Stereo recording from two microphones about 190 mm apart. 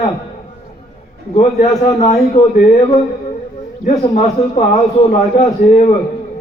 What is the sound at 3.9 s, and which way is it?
A man's voice, 35° left (ahead or behind).